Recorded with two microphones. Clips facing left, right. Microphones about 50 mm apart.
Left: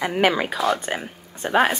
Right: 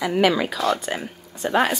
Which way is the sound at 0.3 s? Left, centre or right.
Left.